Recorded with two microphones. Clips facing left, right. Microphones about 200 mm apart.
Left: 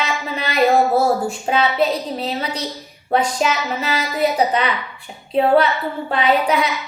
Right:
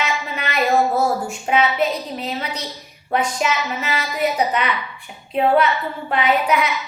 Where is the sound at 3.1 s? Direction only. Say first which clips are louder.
Left 2 dB; 35° left (ahead or behind).